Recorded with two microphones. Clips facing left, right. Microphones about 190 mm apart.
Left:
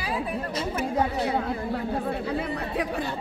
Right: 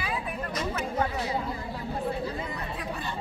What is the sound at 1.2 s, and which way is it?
Speech, 60° left (ahead or behind).